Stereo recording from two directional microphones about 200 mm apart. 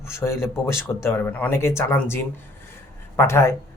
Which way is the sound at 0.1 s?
15° left (ahead or behind).